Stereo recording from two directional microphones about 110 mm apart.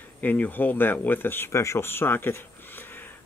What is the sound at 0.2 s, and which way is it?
Speech, 15° left (ahead or behind).